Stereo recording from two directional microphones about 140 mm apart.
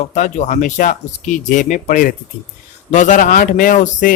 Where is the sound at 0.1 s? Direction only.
60° left (ahead or behind).